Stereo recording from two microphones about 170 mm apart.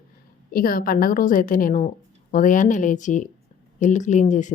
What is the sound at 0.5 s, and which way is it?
A woman's voice, 55° left (ahead or behind).